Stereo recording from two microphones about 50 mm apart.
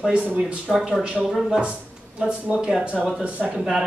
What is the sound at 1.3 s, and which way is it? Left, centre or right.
Speech, centre.